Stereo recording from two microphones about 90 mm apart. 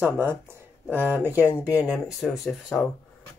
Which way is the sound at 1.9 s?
Centre (ahead or behind).